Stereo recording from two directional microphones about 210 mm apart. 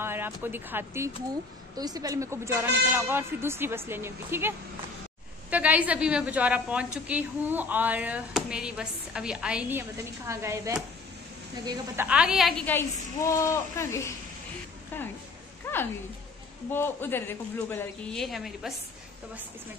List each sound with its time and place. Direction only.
0.0 s a woman's voice: 10° right (ahead or behind)
12.1 s a woman's voice: 5° right (ahead or behind)
15.7 s a sound: 10° left (ahead or behind)
16.7 s a woman's voice: 10° left (ahead or behind)